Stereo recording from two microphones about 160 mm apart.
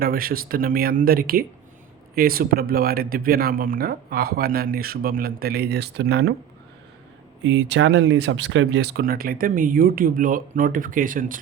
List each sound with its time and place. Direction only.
0.0 s speech: 65° right (ahead or behind); by 6.3 s 90° right
7.4 s speech: 90° right; by 11.3 s 55° right (ahead or behind)